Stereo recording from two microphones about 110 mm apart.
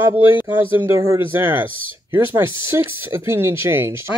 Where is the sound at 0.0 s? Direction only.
20° right (ahead or behind).